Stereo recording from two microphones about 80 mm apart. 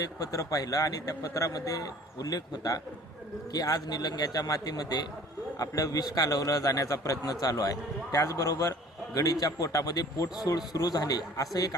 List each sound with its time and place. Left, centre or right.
0.0 s a man's voice: left